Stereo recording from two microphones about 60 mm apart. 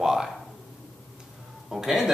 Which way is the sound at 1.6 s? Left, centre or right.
Centre.